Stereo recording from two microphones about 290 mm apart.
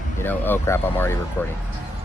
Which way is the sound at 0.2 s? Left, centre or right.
Centre.